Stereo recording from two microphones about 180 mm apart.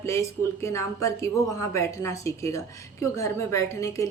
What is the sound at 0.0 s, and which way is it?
Speech, 15° left (ahead or behind).